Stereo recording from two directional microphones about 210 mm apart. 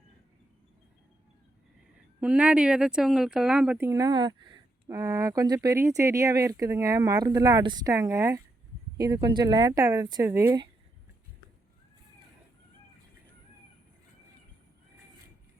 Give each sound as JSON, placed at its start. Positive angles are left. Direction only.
{"t": 2.2, "sound": "speech", "side_deg": -5}